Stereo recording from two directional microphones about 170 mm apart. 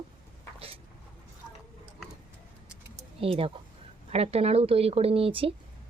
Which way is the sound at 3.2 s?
35° right (ahead or behind).